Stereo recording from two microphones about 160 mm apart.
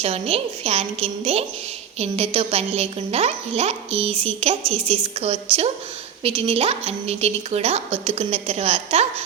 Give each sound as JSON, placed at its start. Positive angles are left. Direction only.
{"t": 0.0, "sound": "speech", "side_deg": -40}